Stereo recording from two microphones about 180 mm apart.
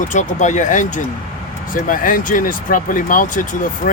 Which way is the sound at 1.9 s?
50° left (ahead or behind).